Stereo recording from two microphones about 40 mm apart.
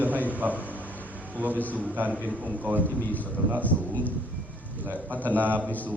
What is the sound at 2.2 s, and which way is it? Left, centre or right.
Speech, right.